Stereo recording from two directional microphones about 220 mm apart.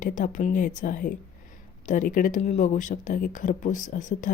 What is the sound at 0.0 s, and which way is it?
Speech, 35° left (ahead or behind).